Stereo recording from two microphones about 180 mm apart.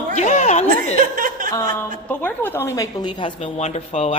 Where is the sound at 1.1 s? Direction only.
50° right (ahead or behind).